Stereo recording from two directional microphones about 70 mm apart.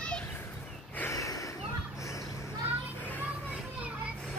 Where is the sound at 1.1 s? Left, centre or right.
Left.